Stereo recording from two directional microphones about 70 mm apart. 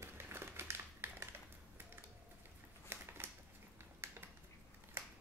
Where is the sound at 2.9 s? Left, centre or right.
Right.